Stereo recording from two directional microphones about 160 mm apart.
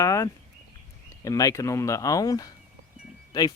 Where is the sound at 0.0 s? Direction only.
20° left (ahead or behind).